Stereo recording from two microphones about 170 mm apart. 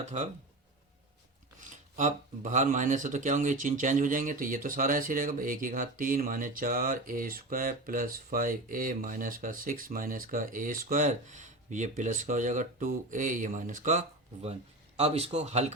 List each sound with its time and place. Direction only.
0.0 s speech: 45° right (ahead or behind)
2.0 s speech: 45° right (ahead or behind)